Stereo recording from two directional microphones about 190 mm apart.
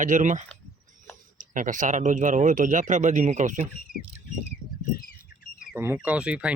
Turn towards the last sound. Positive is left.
turn(degrees=-5)  # may be behind; listen again after turning